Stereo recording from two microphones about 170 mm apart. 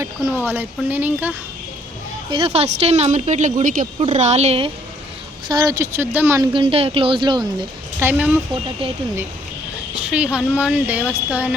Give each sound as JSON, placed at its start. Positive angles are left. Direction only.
{"t": 0.0, "sound": "speech", "side_deg": -15}
{"t": 2.3, "sound": "a woman's voice", "side_deg": -35}
{"t": 5.5, "sound": "speech", "side_deg": -20}
{"t": 6.5, "sound": "speech", "side_deg": -30}
{"t": 7.9, "sound": "speech", "side_deg": -10}
{"t": 9.9, "sound": "speech", "side_deg": -5}